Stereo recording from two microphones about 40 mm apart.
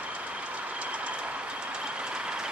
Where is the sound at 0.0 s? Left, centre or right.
Right.